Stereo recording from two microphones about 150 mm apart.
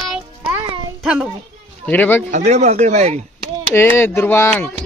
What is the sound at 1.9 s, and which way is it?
Speech, 15° left (ahead or behind).